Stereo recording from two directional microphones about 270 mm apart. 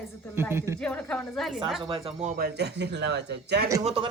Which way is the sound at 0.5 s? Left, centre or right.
Centre.